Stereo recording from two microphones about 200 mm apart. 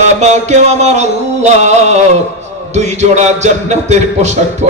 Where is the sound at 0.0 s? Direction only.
35° right (ahead or behind).